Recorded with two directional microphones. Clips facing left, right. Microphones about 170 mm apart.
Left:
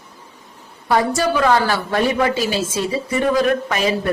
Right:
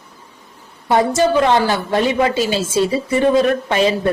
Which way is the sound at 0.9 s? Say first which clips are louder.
Right 3 dB; 20° right (ahead or behind).